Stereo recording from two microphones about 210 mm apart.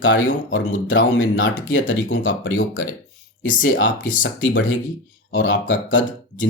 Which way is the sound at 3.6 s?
65° left (ahead or behind).